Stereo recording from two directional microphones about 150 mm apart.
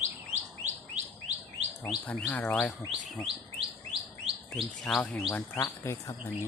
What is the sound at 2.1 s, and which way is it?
Chirp, 10° left (ahead or behind).